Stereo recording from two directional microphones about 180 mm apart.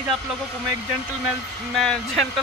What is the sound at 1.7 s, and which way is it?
Speech, centre (ahead or behind).